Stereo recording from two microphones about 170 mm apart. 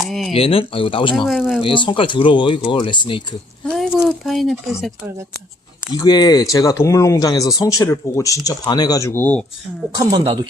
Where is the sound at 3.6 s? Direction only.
Centre (ahead or behind).